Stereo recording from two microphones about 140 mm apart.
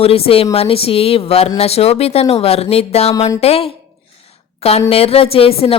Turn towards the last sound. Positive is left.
turn(degrees=45)  # may be behind; listen again after turning